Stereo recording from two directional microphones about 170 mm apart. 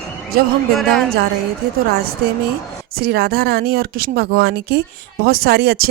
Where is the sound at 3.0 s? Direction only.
70° right (ahead or behind).